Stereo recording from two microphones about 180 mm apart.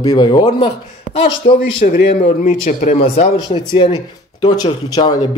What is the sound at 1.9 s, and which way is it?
Speech, 50° left (ahead or behind).